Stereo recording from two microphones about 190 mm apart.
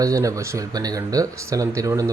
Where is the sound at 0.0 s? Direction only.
15° right (ahead or behind).